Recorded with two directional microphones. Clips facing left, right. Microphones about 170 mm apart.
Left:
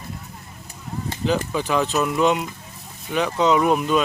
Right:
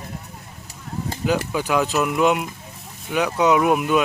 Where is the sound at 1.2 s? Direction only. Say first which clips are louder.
Even; 10° right (ahead or behind).